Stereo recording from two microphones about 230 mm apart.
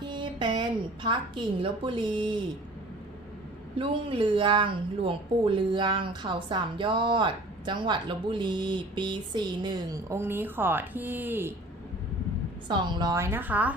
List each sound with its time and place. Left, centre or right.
0.0 s a sound: centre
1.6 s a woman's voice: right
3.8 s a woman's voice: right
12.6 s a woman's voice: centre